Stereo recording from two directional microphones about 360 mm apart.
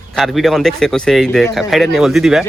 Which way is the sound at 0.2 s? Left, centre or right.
Centre.